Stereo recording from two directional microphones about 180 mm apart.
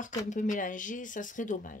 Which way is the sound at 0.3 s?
45° left (ahead or behind).